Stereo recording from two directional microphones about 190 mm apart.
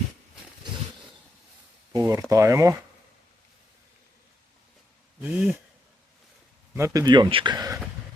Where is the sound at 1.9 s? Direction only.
20° right (ahead or behind).